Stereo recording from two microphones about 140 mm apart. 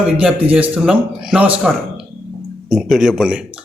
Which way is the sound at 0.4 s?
10° right (ahead or behind).